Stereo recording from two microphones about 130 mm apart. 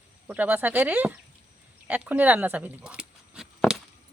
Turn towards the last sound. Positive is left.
turn(degrees=-5)  # may be behind; listen again after turning